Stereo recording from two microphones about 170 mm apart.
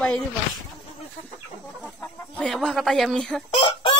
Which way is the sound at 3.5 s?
30° left (ahead or behind).